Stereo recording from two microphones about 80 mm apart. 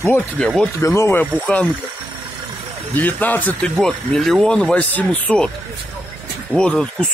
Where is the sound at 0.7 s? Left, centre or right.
Left.